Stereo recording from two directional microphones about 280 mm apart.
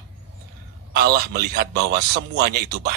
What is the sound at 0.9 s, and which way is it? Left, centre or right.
A man's voice, right.